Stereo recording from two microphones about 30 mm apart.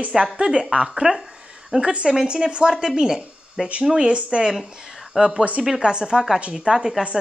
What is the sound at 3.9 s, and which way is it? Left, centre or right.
Speech, right.